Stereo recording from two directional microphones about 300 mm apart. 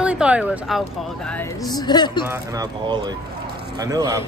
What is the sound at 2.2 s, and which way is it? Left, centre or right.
Speech, centre.